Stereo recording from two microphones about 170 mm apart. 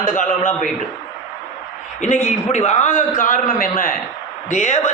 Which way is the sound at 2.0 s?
45° left (ahead or behind).